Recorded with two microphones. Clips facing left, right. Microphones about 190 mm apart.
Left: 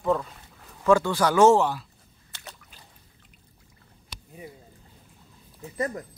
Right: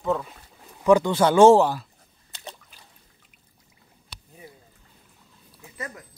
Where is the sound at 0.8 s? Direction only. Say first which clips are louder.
Right 3 dB; 15° right (ahead or behind); by 1.9 s 35° right (ahead or behind).